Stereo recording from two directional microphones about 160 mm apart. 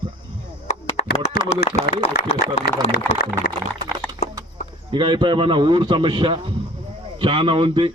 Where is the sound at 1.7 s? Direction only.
45° left (ahead or behind).